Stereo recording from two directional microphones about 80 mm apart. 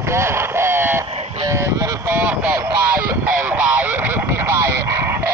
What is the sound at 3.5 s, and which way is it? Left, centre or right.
Radio, right.